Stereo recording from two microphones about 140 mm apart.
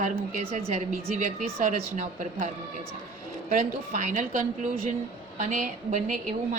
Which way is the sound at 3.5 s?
65° right (ahead or behind).